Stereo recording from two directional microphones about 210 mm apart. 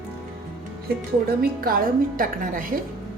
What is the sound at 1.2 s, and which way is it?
A woman's voice, 45° right (ahead or behind).